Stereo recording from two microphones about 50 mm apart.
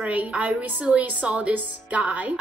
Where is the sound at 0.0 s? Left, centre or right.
Right.